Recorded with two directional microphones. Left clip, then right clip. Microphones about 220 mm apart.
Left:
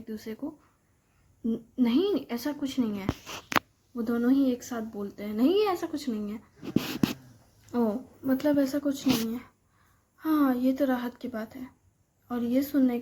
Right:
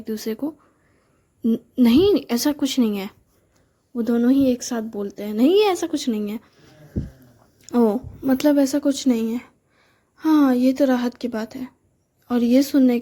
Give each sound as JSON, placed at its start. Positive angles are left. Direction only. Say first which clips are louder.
{"t": 0.0, "sound": "a woman's voice", "louder": "right 11 dB", "side_deg": -45}
{"t": 7.7, "sound": "a woman's voice", "louder": "right 10 dB", "side_deg": -35}